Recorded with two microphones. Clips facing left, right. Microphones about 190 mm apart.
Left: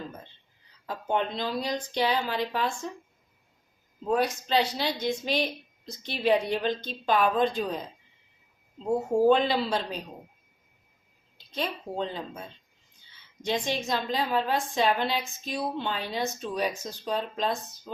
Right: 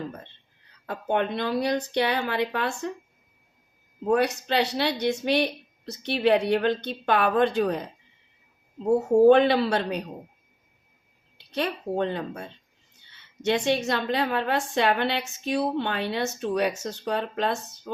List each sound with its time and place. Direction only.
0.9 s a woman's voice: 60° right (ahead or behind)
4.1 s a woman's voice: 65° right (ahead or behind)
9.2 s a woman's voice: 65° right (ahead or behind)
11.3 s a woman's voice: 65° right (ahead or behind)